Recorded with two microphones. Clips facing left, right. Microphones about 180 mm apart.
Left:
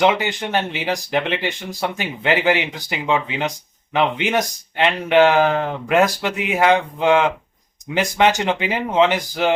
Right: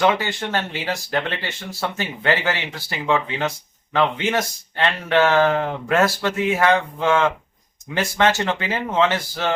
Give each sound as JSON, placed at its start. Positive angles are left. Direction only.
{"t": 0.0, "sound": "speech", "side_deg": 20}